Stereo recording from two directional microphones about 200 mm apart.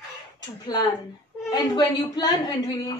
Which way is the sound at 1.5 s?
20° left (ahead or behind).